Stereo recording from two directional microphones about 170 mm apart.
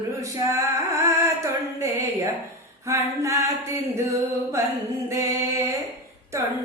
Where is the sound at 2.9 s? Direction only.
20° right (ahead or behind).